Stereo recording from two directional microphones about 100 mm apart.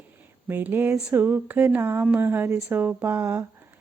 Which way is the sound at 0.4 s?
20° right (ahead or behind).